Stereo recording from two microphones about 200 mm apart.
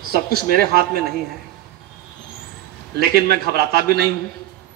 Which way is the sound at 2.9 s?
50° right (ahead or behind).